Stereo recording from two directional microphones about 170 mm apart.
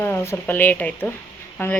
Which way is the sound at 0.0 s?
15° left (ahead or behind).